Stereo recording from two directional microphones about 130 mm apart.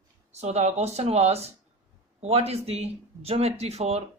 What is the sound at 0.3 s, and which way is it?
Speech, 55° right (ahead or behind).